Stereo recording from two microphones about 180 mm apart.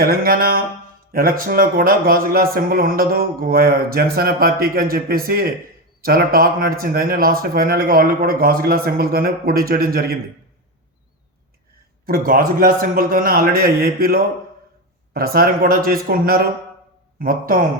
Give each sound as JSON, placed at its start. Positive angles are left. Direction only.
{"t": 0.0, "sound": "speech", "side_deg": -55}
{"t": 12.0, "sound": "a man's voice", "side_deg": -55}